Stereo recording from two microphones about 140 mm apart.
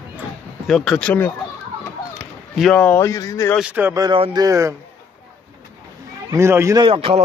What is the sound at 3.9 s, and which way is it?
Speech, 25° right (ahead or behind).